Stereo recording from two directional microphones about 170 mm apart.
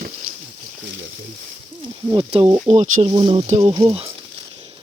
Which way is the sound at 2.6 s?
45° right (ahead or behind).